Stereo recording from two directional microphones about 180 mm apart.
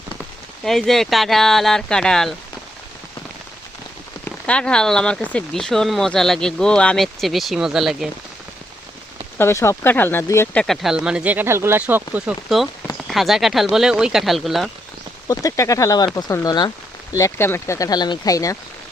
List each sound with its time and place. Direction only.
0.6 s speech: centre (ahead or behind)
4.4 s speech: 5° left (ahead or behind)
9.4 s speech: 15° left (ahead or behind); by 14.7 s centre (ahead or behind)
15.3 s speech: 20° left (ahead or behind)